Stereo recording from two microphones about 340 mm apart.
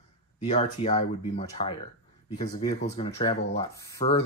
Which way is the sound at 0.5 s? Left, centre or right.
Centre.